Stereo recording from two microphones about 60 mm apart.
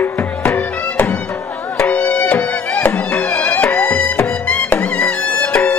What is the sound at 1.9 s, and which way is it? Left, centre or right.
Music, left.